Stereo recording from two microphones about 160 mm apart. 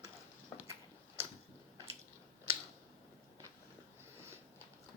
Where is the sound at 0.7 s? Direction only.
15° right (ahead or behind).